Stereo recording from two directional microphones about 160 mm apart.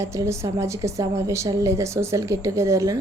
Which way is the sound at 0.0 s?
20° right (ahead or behind).